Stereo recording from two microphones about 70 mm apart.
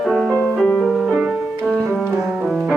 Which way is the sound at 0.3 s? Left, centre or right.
Left.